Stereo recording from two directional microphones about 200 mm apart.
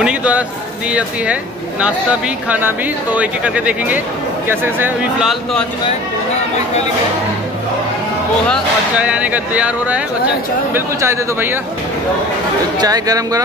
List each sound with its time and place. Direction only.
0.0 s speech: 5° right (ahead or behind)
8.9 s speech: 5° right (ahead or behind)
12.7 s speech: 20° right (ahead or behind)